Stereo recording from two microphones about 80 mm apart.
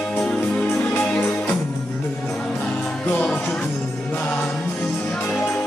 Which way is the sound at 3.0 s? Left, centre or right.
Centre.